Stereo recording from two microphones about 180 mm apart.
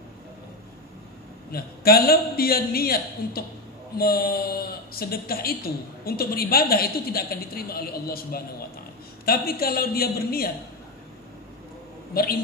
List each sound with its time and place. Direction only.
1.5 s speech: 55° left (ahead or behind)
12.1 s a man's voice: 55° left (ahead or behind)